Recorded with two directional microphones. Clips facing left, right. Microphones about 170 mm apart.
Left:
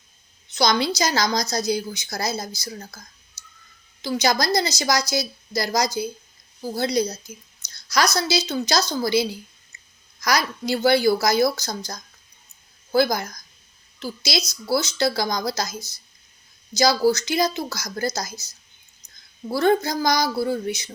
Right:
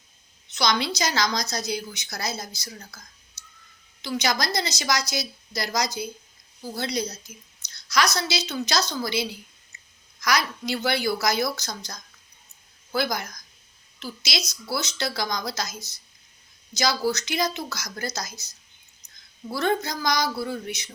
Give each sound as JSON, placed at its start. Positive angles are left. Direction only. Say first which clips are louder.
{"t": 0.5, "sound": "a woman's voice", "louder": "left 4 dB", "side_deg": 35}
{"t": 4.0, "sound": "a woman's voice", "louder": "left 4 dB", "side_deg": 35}
{"t": 16.7, "sound": "a woman's voice", "louder": "left 6 dB", "side_deg": 35}
{"t": 19.5, "sound": "a woman's voice", "louder": "left 6 dB", "side_deg": 35}